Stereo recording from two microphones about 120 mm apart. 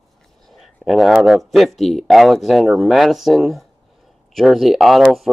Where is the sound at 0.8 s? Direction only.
Centre (ahead or behind).